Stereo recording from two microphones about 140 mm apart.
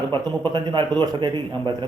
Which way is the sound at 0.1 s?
35° right (ahead or behind).